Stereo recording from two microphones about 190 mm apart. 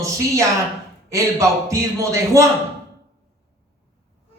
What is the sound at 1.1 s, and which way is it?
A man's voice, 15° right (ahead or behind).